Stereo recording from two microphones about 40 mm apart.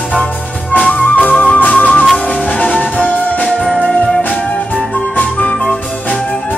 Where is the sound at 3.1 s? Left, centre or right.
Left.